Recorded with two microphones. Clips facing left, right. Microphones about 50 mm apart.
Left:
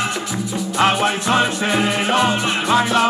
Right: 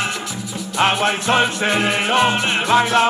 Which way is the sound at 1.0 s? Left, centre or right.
Right.